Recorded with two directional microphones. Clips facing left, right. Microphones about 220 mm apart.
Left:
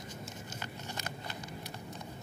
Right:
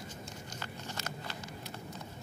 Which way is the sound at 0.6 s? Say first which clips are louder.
Even; 15° left (ahead or behind).